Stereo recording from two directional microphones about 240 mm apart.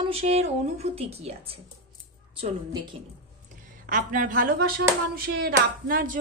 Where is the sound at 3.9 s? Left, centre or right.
Right.